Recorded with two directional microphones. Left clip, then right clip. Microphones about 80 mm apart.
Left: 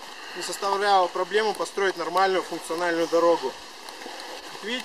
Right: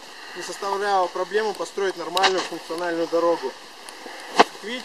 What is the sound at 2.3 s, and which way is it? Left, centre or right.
Speech, left.